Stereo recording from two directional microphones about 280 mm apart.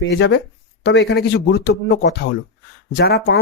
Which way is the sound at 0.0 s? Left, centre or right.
Left.